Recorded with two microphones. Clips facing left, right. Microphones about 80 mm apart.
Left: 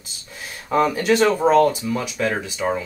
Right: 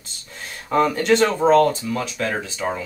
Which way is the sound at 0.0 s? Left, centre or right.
Centre.